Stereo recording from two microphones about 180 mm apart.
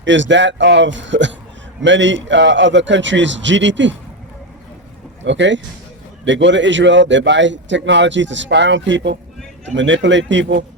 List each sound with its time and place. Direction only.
0.0 s a man's voice: 90° right
5.2 s a man's voice: 90° right